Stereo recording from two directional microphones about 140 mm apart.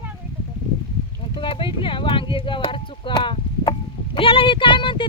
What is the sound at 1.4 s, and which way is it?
Speech, 35° left (ahead or behind).